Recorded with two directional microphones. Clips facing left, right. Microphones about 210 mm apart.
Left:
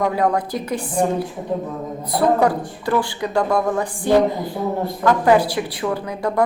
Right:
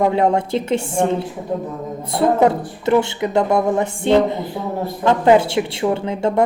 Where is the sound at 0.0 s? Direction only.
25° right (ahead or behind).